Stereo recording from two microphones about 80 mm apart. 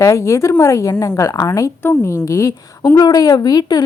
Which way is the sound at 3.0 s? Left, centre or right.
Left.